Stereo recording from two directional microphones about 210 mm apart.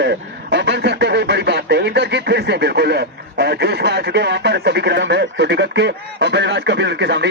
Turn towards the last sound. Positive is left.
turn(degrees=-55)  # may be behind; listen again after turning